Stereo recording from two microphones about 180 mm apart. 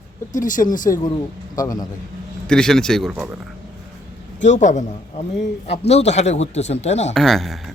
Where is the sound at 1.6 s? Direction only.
20° left (ahead or behind).